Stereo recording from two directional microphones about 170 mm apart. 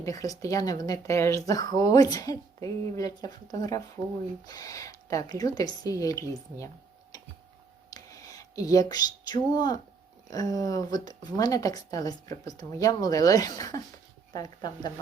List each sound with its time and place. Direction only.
0.0 s speech: 20° left (ahead or behind)
7.9 s a sound: 20° left (ahead or behind)
10.2 s speech: 20° left (ahead or behind)